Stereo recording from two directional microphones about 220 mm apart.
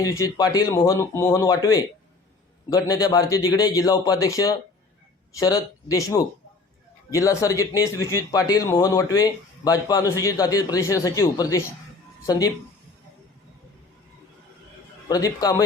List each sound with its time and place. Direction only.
0.0 s speech: 15° left (ahead or behind)
15.1 s speech: 15° left (ahead or behind)